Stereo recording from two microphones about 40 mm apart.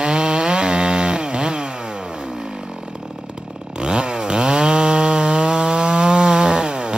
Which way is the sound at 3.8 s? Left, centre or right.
Right.